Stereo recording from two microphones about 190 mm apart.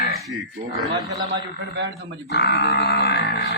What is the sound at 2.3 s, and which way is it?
Grunt, 60° left (ahead or behind).